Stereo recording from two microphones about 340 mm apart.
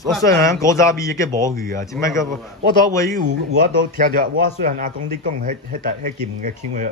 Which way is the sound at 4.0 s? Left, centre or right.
Right.